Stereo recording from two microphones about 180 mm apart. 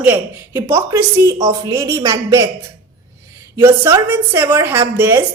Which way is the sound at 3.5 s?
15° right (ahead or behind).